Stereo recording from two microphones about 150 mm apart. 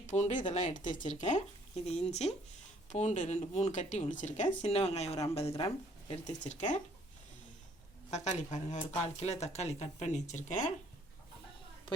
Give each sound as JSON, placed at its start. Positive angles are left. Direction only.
{"t": 0.0, "sound": "speech", "side_deg": 55}
{"t": 4.6, "sound": "speech", "side_deg": 45}
{"t": 8.1, "sound": "speech", "side_deg": 50}